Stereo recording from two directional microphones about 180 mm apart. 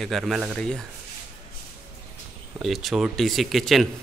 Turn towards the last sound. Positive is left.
turn(degrees=0)  # may be behind; listen again after turning